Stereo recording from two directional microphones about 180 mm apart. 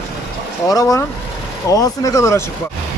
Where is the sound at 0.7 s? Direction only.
20° left (ahead or behind).